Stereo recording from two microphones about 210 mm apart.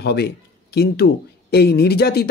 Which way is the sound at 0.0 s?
50° left (ahead or behind).